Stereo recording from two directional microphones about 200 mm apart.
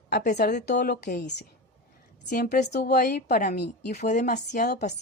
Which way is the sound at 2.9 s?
50° left (ahead or behind).